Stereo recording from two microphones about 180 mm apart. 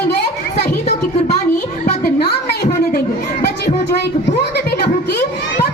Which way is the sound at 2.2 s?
60° left (ahead or behind).